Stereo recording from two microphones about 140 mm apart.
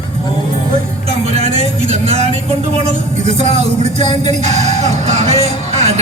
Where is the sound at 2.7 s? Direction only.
50° right (ahead or behind).